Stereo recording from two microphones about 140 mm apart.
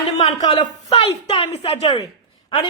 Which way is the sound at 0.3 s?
50° left (ahead or behind).